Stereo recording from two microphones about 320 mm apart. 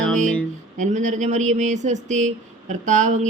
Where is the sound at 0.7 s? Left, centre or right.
Right.